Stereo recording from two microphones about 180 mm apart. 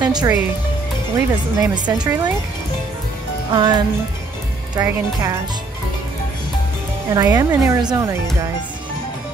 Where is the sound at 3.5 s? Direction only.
25° right (ahead or behind).